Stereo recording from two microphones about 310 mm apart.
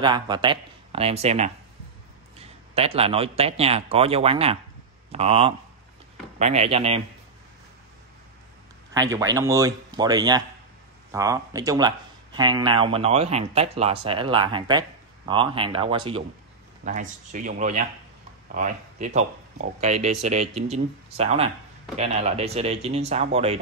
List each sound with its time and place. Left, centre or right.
0.0 s a man's voice: centre
8.9 s speech: centre